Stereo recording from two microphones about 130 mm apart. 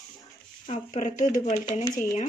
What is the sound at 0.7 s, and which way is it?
Speech, 70° left (ahead or behind).